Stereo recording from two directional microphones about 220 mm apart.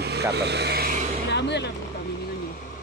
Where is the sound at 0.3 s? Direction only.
50° right (ahead or behind).